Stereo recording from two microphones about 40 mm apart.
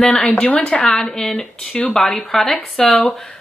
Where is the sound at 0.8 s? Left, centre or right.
Centre.